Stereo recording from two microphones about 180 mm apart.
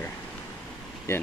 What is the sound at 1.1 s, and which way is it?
Speech, 15° left (ahead or behind).